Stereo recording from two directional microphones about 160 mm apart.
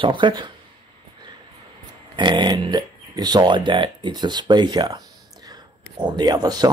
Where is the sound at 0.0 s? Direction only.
30° right (ahead or behind).